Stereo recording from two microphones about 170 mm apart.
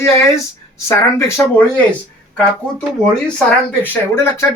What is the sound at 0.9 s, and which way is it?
Speech, 15° left (ahead or behind).